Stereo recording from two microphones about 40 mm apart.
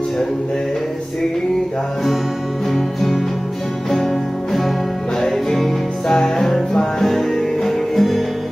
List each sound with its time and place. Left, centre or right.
2.7 s music: centre